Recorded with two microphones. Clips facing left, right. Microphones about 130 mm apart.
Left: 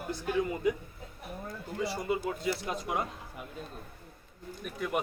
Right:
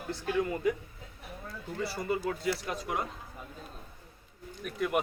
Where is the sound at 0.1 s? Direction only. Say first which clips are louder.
Even; 15° left (ahead or behind).